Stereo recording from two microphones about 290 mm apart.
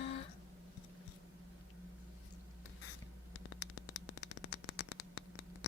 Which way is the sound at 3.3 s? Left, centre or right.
Left.